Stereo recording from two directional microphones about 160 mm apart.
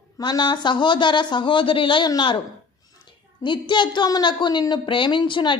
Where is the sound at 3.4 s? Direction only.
30° left (ahead or behind).